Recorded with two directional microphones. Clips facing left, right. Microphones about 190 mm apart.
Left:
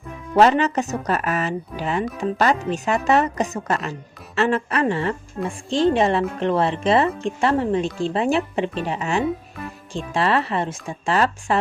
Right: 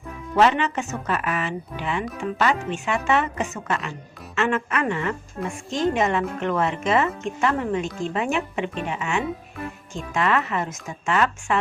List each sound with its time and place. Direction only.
0.3 s speech: 40° left (ahead or behind)